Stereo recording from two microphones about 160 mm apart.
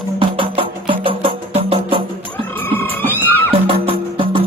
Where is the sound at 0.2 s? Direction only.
35° right (ahead or behind).